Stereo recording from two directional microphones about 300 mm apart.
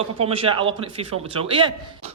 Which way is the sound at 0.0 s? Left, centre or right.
Centre.